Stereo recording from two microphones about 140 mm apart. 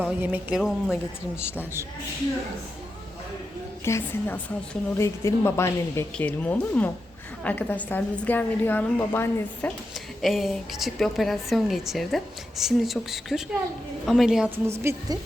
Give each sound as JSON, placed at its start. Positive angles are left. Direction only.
{"t": 0.0, "sound": "a woman's voice", "side_deg": -10}
{"t": 3.8, "sound": "a woman's voice", "side_deg": 20}
{"t": 10.2, "sound": "a woman's voice", "side_deg": 0}